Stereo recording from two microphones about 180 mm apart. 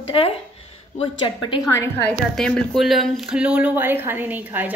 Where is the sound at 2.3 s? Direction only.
5° left (ahead or behind).